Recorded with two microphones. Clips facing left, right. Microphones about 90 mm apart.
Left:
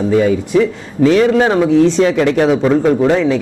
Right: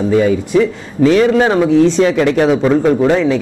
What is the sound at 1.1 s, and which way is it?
A man's voice, 15° right (ahead or behind).